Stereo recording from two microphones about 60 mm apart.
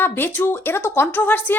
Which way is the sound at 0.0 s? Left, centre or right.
Left.